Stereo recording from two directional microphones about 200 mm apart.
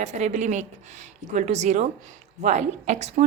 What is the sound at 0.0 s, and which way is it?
A woman's voice, 35° right (ahead or behind).